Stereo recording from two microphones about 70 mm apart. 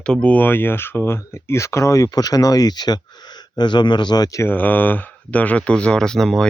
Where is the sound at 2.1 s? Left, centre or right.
Left.